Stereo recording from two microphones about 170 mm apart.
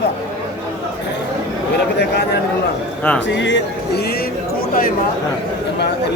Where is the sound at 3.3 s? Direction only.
90° left.